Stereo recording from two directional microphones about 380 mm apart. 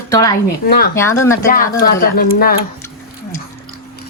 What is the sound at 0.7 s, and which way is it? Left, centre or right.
Speech, left.